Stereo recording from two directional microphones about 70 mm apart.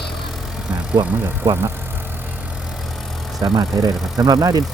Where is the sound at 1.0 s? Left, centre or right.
Right.